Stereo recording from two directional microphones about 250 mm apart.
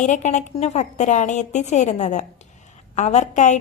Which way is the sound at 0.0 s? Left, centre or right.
Left.